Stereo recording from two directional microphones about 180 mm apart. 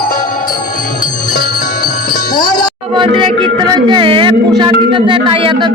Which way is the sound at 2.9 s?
25° right (ahead or behind).